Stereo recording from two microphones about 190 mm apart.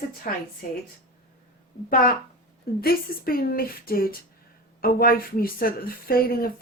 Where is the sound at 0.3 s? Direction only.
50° left (ahead or behind).